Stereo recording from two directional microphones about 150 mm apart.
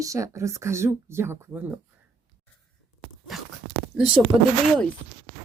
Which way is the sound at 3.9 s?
5° right (ahead or behind).